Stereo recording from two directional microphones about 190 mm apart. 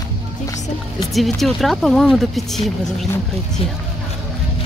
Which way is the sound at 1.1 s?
Centre (ahead or behind).